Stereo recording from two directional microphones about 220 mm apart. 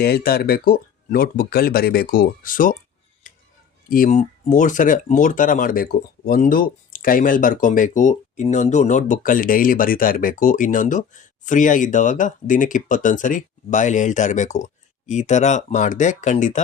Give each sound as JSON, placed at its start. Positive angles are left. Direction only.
{"t": 0.0, "sound": "speech", "side_deg": 45}
{"t": 3.3, "sound": "a sound", "side_deg": 35}
{"t": 3.8, "sound": "speech", "side_deg": 40}